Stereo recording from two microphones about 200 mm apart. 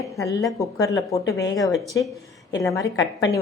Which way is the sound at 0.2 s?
15° left (ahead or behind).